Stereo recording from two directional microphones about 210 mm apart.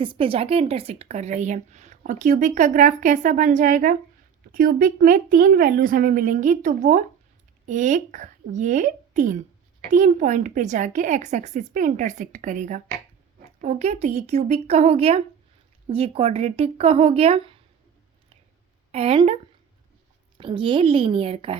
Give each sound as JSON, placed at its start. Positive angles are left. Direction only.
{"t": 0.0, "sound": "a woman's voice", "side_deg": -25}
{"t": 18.9, "sound": "speech", "side_deg": -30}
{"t": 20.4, "sound": "speech", "side_deg": -25}